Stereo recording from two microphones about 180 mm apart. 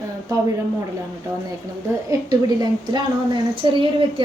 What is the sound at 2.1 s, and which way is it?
A woman's voice, 20° right (ahead or behind).